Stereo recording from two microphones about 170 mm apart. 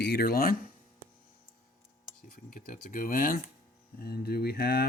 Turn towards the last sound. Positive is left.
turn(degrees=65)  # may be behind; listen again after turning